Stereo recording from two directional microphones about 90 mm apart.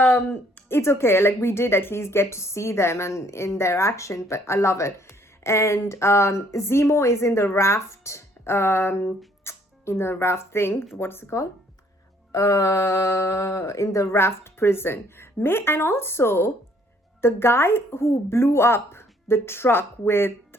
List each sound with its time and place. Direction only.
0.7 s speech: 30° left (ahead or behind)